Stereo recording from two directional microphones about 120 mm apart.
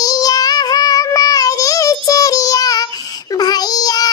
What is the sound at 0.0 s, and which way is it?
Child singing, 30° left (ahead or behind).